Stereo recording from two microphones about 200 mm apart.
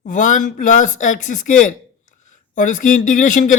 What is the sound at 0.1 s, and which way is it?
A woman's voice, 40° left (ahead or behind).